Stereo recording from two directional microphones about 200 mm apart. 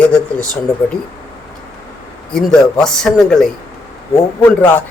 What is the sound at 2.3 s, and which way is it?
Speech, 5° left (ahead or behind).